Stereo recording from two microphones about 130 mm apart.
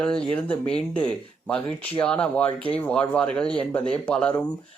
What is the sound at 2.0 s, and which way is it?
Speech, 10° left (ahead or behind).